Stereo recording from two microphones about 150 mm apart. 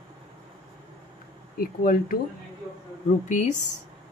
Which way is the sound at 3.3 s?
55° left (ahead or behind).